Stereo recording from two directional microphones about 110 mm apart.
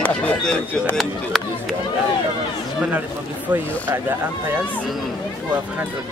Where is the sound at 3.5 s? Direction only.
20° right (ahead or behind).